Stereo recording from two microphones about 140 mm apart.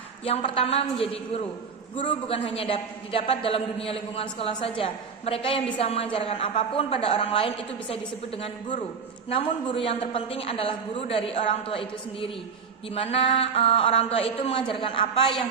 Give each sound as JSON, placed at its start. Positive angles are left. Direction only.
{"t": 0.3, "sound": "a woman's voice", "side_deg": 40}
{"t": 2.0, "sound": "a woman's voice", "side_deg": 40}
{"t": 9.3, "sound": "a woman's voice", "side_deg": 40}